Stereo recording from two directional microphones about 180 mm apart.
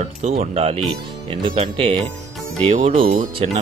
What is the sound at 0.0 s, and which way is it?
A man's voice, 35° right (ahead or behind).